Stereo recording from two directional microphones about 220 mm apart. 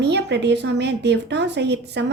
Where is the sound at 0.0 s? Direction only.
50° right (ahead or behind).